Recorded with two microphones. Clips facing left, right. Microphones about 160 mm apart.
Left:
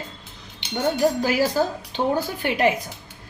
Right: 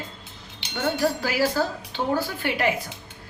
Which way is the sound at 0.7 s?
20° left (ahead or behind).